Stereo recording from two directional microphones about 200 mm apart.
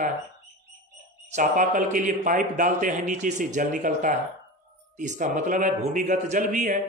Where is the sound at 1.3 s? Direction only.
40° right (ahead or behind).